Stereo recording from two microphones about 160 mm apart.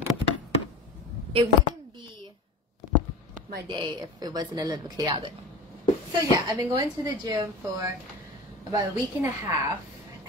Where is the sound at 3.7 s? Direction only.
30° right (ahead or behind).